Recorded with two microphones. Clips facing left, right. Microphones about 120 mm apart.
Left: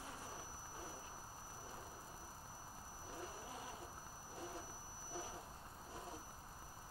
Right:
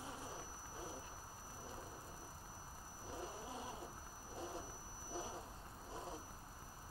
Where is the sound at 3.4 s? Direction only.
25° right (ahead or behind).